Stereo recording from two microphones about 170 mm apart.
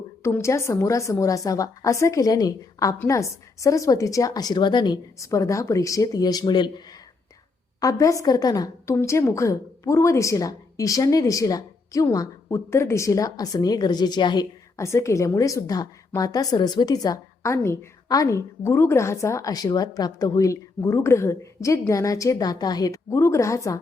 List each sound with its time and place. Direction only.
0.2 s a woman's voice: 15° left (ahead or behind)